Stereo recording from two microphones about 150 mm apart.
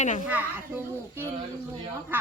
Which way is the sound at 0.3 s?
10° right (ahead or behind).